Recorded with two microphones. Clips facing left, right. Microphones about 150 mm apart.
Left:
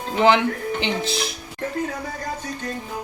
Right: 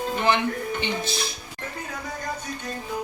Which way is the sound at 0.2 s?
90° left.